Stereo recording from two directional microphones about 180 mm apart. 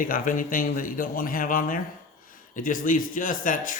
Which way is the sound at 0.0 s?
50° left (ahead or behind).